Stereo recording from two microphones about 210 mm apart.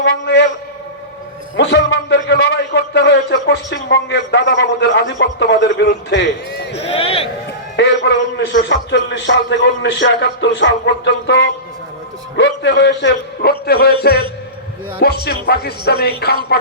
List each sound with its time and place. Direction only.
0.0 s a man's voice: 55° left (ahead or behind)
1.5 s a man's voice: 55° left (ahead or behind)
6.8 s speech: 30° left (ahead or behind)
7.8 s a man's voice: 55° left (ahead or behind)